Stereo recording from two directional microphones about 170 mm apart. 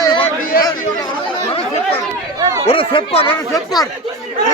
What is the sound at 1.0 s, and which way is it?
Chatter, 25° left (ahead or behind).